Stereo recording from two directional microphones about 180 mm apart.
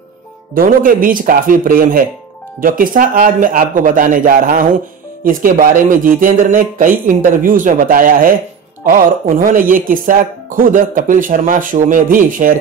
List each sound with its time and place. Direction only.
0.6 s speech: 50° right (ahead or behind)